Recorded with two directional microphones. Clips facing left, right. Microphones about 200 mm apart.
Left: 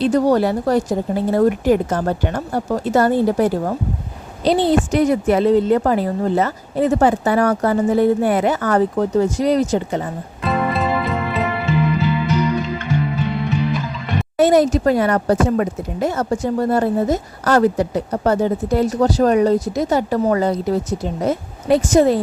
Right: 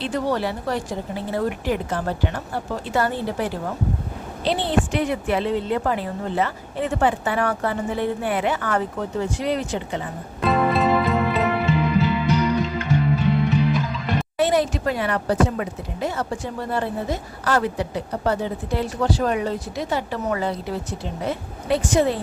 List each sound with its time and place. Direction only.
0.0 s a woman's voice: 40° left (ahead or behind)
10.4 s music: centre (ahead or behind)
13.1 s music: centre (ahead or behind)
14.3 s speech: 45° left (ahead or behind)